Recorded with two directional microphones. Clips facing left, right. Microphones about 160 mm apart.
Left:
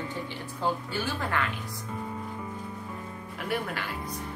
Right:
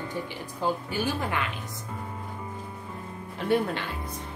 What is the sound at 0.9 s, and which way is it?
Speech, 15° right (ahead or behind).